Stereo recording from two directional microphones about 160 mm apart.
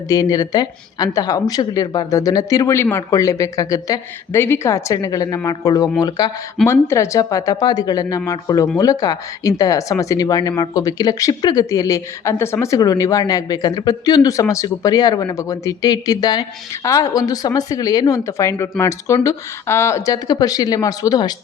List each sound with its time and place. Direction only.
0.1 s speech: 25° left (ahead or behind)